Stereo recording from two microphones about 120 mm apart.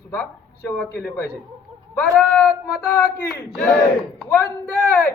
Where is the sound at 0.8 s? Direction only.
15° left (ahead or behind).